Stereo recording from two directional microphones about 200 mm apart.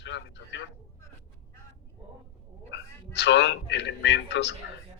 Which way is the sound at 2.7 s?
60° left (ahead or behind).